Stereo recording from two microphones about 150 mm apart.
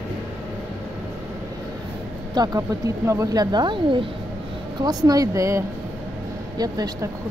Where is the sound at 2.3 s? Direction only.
25° right (ahead or behind).